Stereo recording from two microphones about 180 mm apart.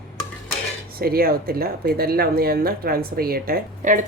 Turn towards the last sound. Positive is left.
turn(degrees=-45)  # may be behind; listen again after turning